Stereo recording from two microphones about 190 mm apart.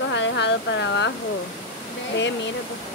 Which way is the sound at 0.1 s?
70° left (ahead or behind).